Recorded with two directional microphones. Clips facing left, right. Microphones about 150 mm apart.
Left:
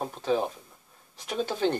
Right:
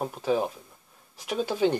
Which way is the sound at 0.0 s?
5° right (ahead or behind).